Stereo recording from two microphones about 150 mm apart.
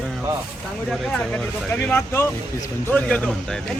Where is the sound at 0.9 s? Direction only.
5° left (ahead or behind).